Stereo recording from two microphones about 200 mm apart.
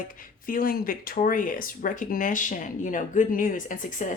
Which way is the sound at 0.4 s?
45° left (ahead or behind).